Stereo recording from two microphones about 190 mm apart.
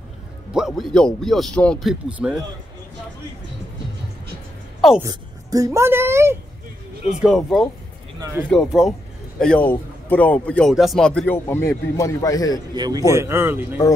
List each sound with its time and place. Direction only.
0.5 s a man's voice: 5° right (ahead or behind)
5.0 s a woman's voice: 15° right (ahead or behind)
7.2 s a man's voice: centre (ahead or behind)
8.2 s speech: 15° right (ahead or behind)
8.5 s a man's voice: centre (ahead or behind); by 12.5 s 20° left (ahead or behind)
12.7 s a man's voice: 20° right (ahead or behind)